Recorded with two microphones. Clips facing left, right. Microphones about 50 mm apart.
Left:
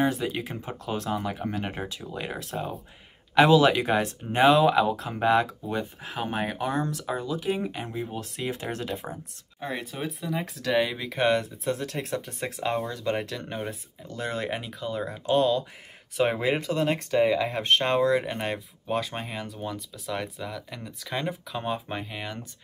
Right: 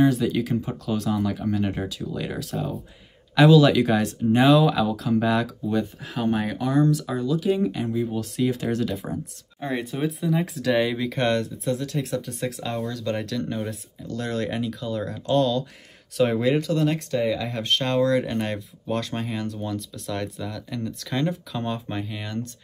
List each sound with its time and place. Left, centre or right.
0.1 s speech: left
9.0 s speech: centre
11.4 s speech: left